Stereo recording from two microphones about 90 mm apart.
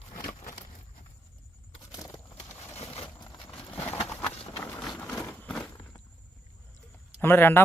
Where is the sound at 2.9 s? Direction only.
90° left.